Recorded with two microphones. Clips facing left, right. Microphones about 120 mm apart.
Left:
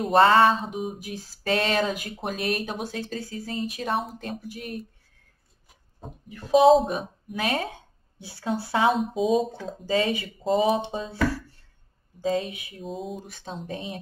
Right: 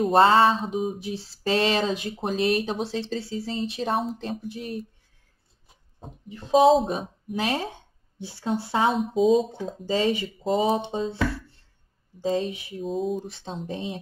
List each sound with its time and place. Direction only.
0.1 s speech: 25° right (ahead or behind)
0.6 s speech: centre (ahead or behind)
0.9 s speech: 30° right (ahead or behind)
6.2 s speech: 25° right (ahead or behind)
6.6 s speech: centre (ahead or behind)
6.9 s speech: 30° right (ahead or behind)
8.9 s speech: centre (ahead or behind)
9.8 s speech: 25° right (ahead or behind)
12.8 s speech: centre (ahead or behind)
13.3 s speech: 25° right (ahead or behind)